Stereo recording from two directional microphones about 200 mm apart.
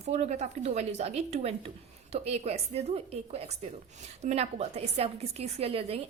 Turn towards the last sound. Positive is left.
turn(degrees=-30)  # may be behind; listen again after turning